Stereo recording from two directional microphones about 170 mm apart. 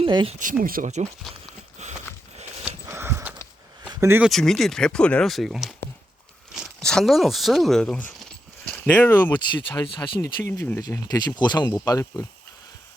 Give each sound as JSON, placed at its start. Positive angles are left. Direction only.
{"t": 0.0, "sound": "speech", "side_deg": -30}
{"t": 0.3, "sound": "speech", "side_deg": -55}
{"t": 1.8, "sound": "a sound", "side_deg": -40}
{"t": 2.8, "sound": "horse", "side_deg": -15}
{"t": 3.8, "sound": "a sound", "side_deg": -10}
{"t": 4.3, "sound": "speech", "side_deg": 0}
{"t": 9.3, "sound": "speech", "side_deg": 25}